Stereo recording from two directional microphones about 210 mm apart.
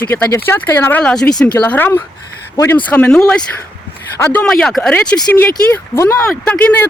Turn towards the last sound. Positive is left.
turn(degrees=5)  # may be behind; listen again after turning